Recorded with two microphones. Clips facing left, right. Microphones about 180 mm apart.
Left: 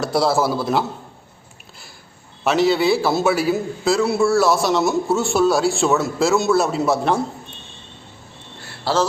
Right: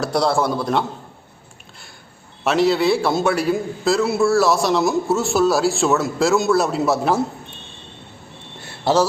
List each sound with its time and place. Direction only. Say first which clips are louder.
0.0 s a man's voice: left 1 dB; centre (ahead or behind)
2.4 s a man's voice: even; centre (ahead or behind)
8.6 s a sound: right 3 dB; 20° right (ahead or behind)